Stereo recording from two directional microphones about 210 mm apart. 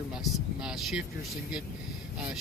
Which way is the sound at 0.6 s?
Centre (ahead or behind).